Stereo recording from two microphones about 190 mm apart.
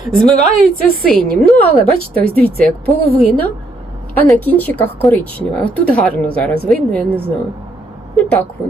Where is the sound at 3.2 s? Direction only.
10° left (ahead or behind).